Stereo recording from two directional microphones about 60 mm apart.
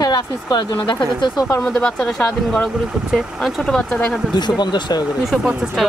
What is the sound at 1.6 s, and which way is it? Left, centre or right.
Speech, centre.